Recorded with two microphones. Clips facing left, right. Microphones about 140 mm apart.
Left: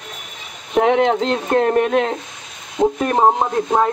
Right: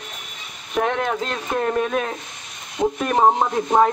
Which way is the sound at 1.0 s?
25° left (ahead or behind).